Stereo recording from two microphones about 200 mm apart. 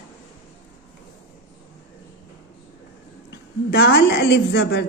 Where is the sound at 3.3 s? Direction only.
60° left (ahead or behind).